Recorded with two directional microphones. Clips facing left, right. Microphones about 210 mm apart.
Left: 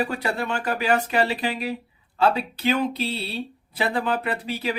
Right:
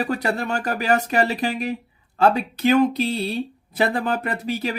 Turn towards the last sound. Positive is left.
turn(degrees=-45)  # may be behind; listen again after turning